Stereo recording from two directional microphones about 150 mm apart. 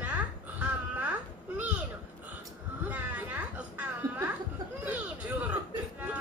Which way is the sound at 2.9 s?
10° right (ahead or behind).